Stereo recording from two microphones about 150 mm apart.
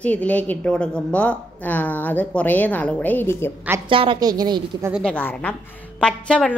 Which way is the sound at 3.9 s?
35° right (ahead or behind).